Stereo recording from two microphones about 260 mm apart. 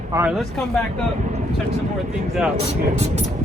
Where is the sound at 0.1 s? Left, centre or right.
Centre.